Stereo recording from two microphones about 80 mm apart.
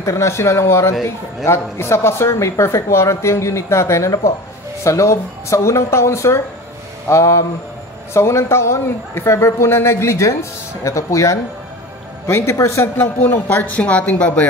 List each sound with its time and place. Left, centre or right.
0.0 s speech: left
13.3 s speech: left